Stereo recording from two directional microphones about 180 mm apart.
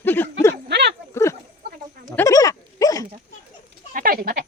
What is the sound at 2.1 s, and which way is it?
Goat, 15° left (ahead or behind).